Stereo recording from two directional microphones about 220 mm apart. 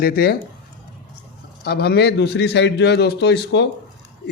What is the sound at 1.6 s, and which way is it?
A man's voice, 45° left (ahead or behind).